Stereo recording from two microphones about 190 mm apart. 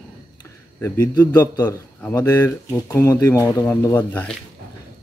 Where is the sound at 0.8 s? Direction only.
15° left (ahead or behind).